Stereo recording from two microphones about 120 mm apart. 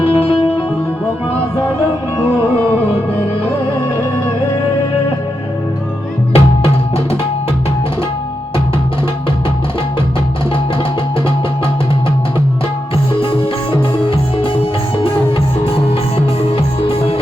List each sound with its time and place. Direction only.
0.0 s music: 50° left (ahead or behind)
6.3 s music: 55° left (ahead or behind)
13.1 s music: 50° left (ahead or behind)